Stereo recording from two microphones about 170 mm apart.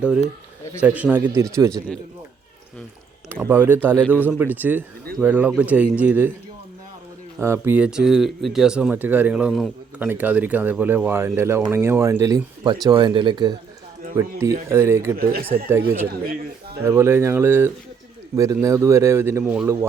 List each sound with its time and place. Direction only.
0.8 s speech: 10° right (ahead or behind)
3.2 s a sound: 15° right (ahead or behind)
4.1 s speech: 10° right (ahead or behind)
7.3 s speech: 15° right (ahead or behind)
14.2 s speech: 15° right (ahead or behind)
15.2 s a man's voice: 60° right (ahead or behind)
16.8 s speech: 15° right (ahead or behind)